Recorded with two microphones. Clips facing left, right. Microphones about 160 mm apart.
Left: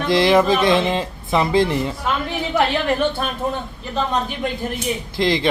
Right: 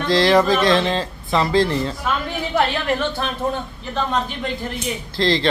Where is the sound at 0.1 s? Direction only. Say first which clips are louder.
Even; 20° left (ahead or behind).